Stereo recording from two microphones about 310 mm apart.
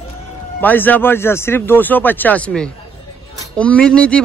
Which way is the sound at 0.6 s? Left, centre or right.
Centre.